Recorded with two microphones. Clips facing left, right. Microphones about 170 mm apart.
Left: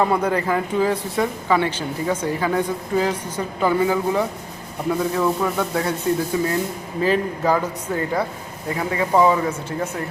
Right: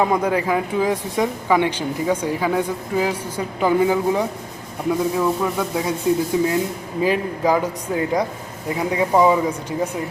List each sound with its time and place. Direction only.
0.0 s speech: 10° right (ahead or behind)